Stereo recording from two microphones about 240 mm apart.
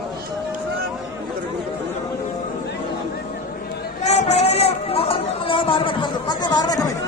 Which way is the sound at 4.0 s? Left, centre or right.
Left.